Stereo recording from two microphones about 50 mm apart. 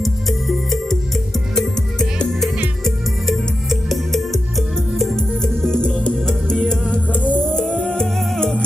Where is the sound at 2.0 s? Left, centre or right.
Centre.